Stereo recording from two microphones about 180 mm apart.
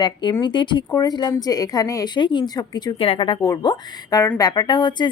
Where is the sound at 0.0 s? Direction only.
25° left (ahead or behind).